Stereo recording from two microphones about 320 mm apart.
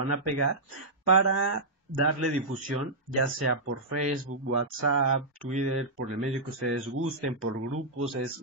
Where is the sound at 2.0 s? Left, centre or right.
Right.